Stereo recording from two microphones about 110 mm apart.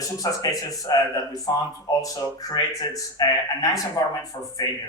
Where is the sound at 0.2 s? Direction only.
35° left (ahead or behind).